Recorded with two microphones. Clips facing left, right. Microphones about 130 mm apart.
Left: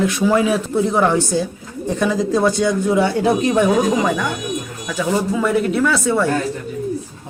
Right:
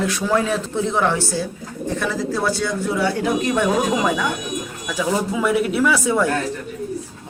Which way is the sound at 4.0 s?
5° right (ahead or behind).